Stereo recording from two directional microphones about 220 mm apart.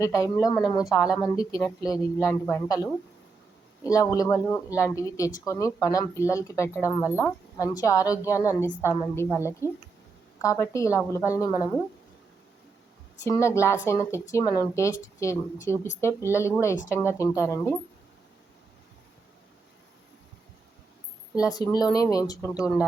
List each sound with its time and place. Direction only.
0.0 s speech: 15° left (ahead or behind)
0.9 s a woman's voice: centre (ahead or behind)
1.4 s speech: 15° left (ahead or behind)
3.8 s speech: 15° left (ahead or behind)
13.2 s speech: 15° left (ahead or behind)
21.5 s speech: 15° left (ahead or behind)
22.5 s a woman's voice: 5° right (ahead or behind)